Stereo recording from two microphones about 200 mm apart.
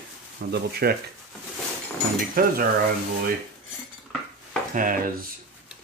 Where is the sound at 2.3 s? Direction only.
45° right (ahead or behind).